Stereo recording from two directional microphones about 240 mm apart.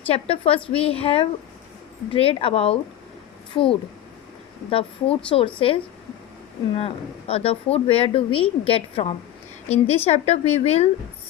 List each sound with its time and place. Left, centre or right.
0.1 s a woman's voice: left